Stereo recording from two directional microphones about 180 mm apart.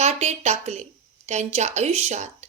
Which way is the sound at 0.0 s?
35° right (ahead or behind).